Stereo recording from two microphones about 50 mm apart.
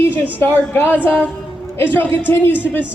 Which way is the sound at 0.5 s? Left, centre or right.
Left.